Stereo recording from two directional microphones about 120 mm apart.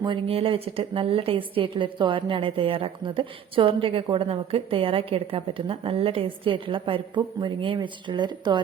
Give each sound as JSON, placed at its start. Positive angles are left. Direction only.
{"t": 0.0, "sound": "a woman's voice", "side_deg": -45}